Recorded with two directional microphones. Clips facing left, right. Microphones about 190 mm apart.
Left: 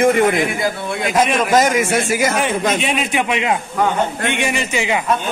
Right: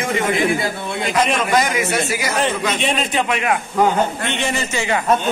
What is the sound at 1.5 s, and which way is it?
Speech, 45° left (ahead or behind).